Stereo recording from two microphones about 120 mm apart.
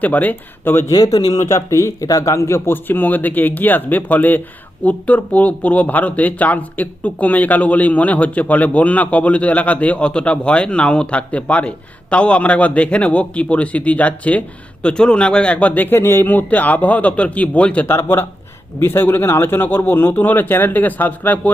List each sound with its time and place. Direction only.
0.0 s speech: 15° left (ahead or behind)
0.9 s a man's voice: 30° left (ahead or behind); by 21.5 s 15° left (ahead or behind)